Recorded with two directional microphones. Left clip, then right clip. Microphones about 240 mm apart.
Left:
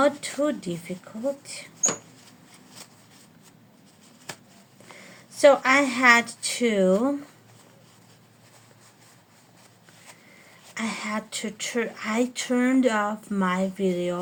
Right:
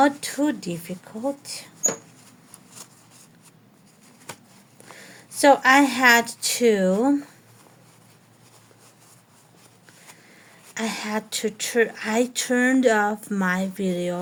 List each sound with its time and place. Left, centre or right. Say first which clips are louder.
0.0 s speech: right 2 dB; right
4.9 s speech: even; right
10.8 s speech: right 2 dB; right